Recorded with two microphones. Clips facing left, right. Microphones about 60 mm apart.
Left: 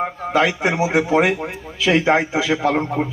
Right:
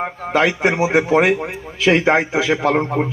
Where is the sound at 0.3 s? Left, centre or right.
Right.